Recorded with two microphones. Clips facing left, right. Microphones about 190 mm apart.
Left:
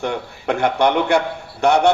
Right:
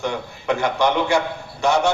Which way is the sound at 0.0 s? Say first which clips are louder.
Left 2 dB; 60° left (ahead or behind).